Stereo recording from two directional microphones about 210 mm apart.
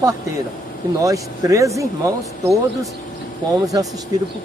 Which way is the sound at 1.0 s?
15° right (ahead or behind).